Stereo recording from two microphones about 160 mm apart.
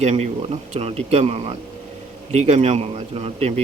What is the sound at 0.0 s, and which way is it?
Speech, 40° right (ahead or behind).